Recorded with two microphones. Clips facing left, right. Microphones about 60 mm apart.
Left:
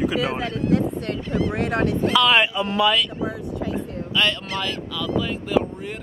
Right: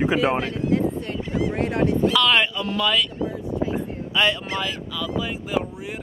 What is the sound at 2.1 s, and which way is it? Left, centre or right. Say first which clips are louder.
Speech: left 5 dB; centre.